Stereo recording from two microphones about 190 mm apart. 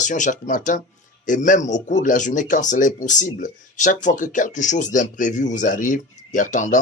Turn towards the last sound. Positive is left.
turn(degrees=40)  # may be behind; listen again after turning